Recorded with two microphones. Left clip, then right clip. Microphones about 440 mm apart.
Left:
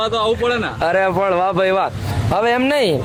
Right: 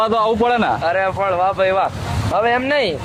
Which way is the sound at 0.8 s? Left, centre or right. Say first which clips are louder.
Left 2 dB; left.